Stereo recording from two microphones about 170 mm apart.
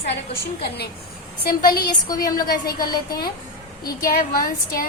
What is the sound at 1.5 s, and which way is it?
A woman's voice, 60° left (ahead or behind).